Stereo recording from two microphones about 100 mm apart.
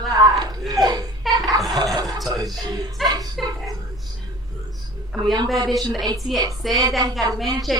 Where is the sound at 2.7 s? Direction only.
40° right (ahead or behind).